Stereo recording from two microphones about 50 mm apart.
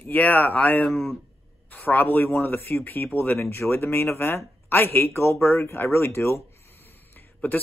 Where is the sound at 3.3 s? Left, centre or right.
Left.